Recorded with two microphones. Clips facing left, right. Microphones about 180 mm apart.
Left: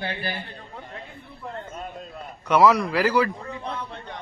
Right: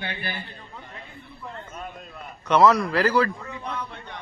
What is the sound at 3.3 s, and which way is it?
Speech, 30° left (ahead or behind).